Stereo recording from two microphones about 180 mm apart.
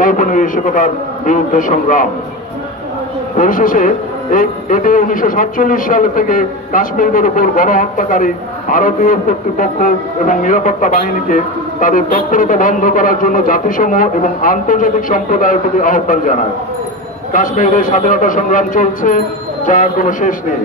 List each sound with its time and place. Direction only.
0.0 s speech: 45° left (ahead or behind)
3.3 s speech: 50° left (ahead or behind)